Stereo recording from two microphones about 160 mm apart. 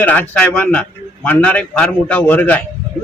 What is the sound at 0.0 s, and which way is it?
A man's voice, 10° left (ahead or behind).